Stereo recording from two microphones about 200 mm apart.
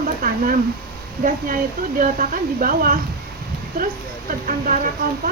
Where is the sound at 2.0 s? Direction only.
45° right (ahead or behind).